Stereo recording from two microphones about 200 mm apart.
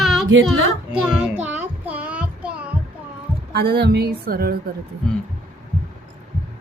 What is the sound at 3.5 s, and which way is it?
A woman's voice, 55° right (ahead or behind).